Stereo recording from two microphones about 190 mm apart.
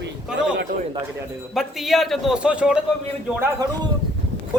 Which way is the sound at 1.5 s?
Centre (ahead or behind).